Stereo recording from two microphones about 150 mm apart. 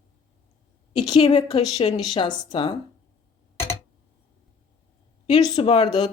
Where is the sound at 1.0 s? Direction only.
30° left (ahead or behind).